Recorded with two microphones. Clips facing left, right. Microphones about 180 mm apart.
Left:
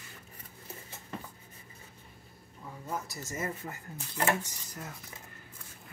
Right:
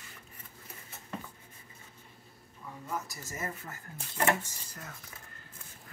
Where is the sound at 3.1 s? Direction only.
25° left (ahead or behind).